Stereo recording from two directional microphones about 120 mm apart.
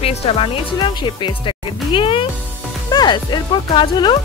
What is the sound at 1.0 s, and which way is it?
Speech, 40° left (ahead or behind).